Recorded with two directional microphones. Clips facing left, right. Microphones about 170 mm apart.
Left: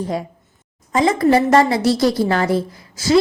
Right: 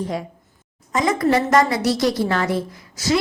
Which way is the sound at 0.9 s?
30° left (ahead or behind).